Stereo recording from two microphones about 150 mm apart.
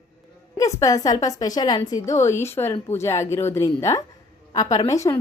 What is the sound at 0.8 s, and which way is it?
A woman's voice, 25° left (ahead or behind).